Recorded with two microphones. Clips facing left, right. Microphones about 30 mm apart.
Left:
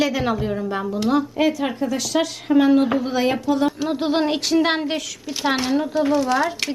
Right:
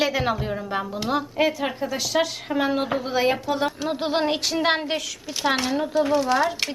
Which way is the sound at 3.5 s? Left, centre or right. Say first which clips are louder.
Left 4 dB; centre.